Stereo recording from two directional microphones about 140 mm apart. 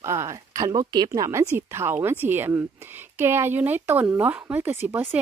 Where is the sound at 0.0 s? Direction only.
20° right (ahead or behind).